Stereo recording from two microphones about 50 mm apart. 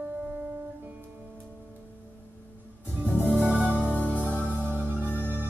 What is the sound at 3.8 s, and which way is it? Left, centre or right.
Music, left.